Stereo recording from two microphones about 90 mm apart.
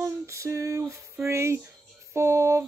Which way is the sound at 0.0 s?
35° right (ahead or behind).